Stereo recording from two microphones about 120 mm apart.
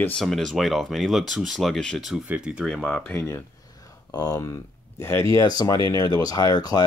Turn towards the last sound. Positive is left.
turn(degrees=35)  # may be behind; listen again after turning